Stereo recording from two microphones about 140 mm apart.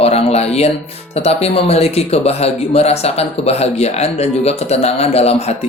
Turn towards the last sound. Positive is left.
turn(degrees=50)  # may be behind; listen again after turning